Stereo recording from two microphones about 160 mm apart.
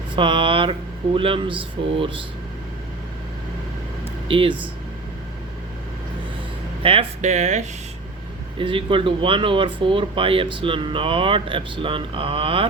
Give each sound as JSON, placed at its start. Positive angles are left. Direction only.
{"t": 0.2, "sound": "speech", "side_deg": -30}
{"t": 4.3, "sound": "speech", "side_deg": -35}
{"t": 6.8, "sound": "speech", "side_deg": -35}
{"t": 8.5, "sound": "speech", "side_deg": -35}